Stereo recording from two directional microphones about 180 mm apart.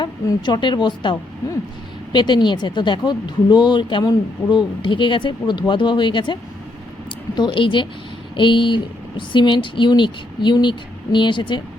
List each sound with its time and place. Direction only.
0.0 s a woman's voice: 25° left (ahead or behind)
2.1 s speech: 25° left (ahead or behind)